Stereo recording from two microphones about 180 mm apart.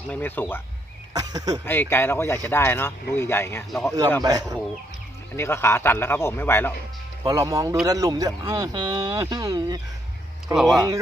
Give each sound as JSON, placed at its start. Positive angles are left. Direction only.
{"t": 0.1, "sound": "speech", "side_deg": 10}
{"t": 1.1, "sound": "speech", "side_deg": -20}
{"t": 1.6, "sound": "speech", "side_deg": 10}
{"t": 4.2, "sound": "speech", "side_deg": -20}
{"t": 5.4, "sound": "speech", "side_deg": 15}
{"t": 7.3, "sound": "speech", "side_deg": -20}
{"t": 10.5, "sound": "speech", "side_deg": 0}
{"t": 10.8, "sound": "speech", "side_deg": -20}